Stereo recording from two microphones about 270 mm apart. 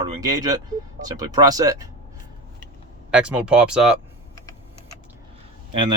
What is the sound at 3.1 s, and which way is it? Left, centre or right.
Speech, centre.